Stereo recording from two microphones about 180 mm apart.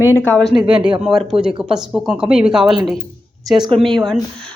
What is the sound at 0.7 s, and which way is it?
Speech, 30° right (ahead or behind).